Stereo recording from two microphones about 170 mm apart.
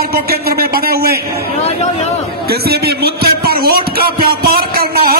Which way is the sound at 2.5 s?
70° right (ahead or behind).